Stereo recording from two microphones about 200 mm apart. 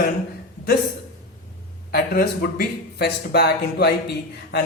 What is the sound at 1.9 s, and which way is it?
A man's voice, 50° left (ahead or behind).